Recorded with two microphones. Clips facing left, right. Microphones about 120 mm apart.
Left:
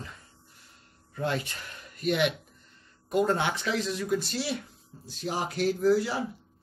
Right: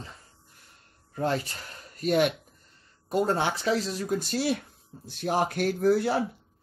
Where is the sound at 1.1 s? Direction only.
40° right (ahead or behind); by 6.2 s 55° right (ahead or behind).